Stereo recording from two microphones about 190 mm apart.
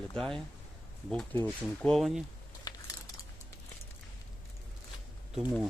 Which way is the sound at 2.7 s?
20° left (ahead or behind).